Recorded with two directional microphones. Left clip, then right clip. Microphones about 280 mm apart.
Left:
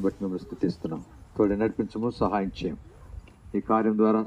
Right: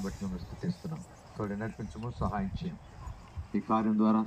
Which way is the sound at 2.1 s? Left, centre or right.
Left.